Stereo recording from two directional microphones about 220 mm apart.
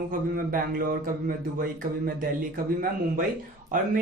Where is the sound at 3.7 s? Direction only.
35° right (ahead or behind).